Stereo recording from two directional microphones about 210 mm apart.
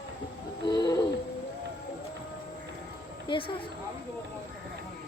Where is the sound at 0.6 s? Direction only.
20° left (ahead or behind).